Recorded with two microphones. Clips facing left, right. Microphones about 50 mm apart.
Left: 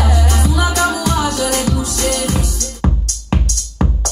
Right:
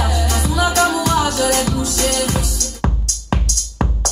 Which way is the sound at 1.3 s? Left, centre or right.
Right.